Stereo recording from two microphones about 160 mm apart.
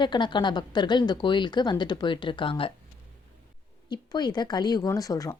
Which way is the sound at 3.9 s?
25° left (ahead or behind).